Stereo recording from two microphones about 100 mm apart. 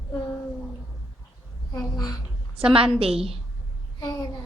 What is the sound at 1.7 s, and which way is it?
Speech, 40° left (ahead or behind).